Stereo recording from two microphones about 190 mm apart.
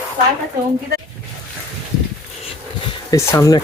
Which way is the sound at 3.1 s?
15° left (ahead or behind).